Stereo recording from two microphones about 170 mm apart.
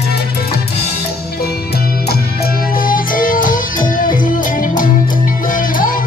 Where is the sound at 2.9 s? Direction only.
55° left (ahead or behind).